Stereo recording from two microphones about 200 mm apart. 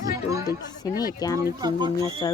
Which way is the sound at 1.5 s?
15° right (ahead or behind).